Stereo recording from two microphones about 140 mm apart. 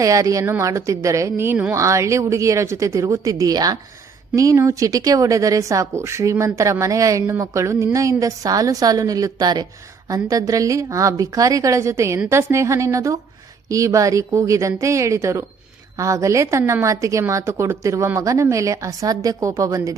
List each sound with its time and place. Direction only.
0.0 s a woman's voice: 25° right (ahead or behind)